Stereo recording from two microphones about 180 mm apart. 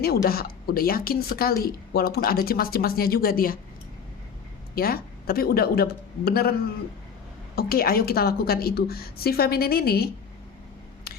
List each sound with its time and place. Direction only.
0.0 s a woman's voice: 60° left (ahead or behind)
4.7 s a woman's voice: 55° left (ahead or behind)
7.5 s a woman's voice: 55° left (ahead or behind)